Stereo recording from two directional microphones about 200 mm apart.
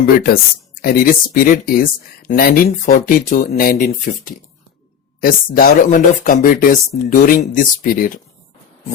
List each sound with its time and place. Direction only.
0.8 s speech: 50° left (ahead or behind)